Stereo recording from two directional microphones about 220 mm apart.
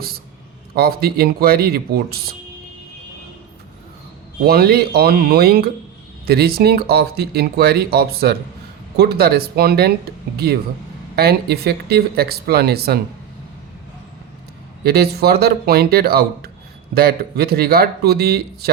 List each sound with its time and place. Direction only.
0.8 s speech: 45° right (ahead or behind)
4.4 s speech: 45° right (ahead or behind)
14.8 s speech: 45° right (ahead or behind)